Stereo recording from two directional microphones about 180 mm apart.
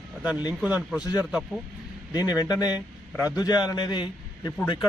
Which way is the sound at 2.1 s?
20° left (ahead or behind).